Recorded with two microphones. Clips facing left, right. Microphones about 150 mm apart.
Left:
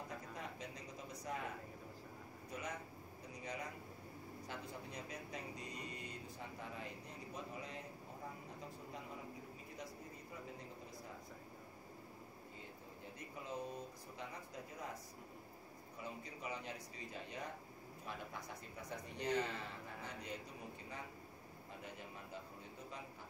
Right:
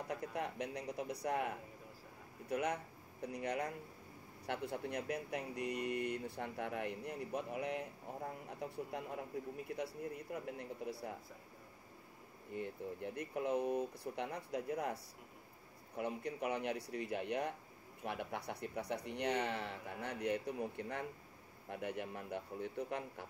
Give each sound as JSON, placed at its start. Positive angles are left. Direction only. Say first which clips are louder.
{"t": 0.1, "sound": "speech", "louder": "right 8 dB", "side_deg": -65}
{"t": 2.5, "sound": "speech", "louder": "right 10 dB", "side_deg": -65}
{"t": 12.5, "sound": "speech", "louder": "right 16 dB", "side_deg": -65}
{"t": 16.0, "sound": "speech", "louder": "right 9 dB", "side_deg": -65}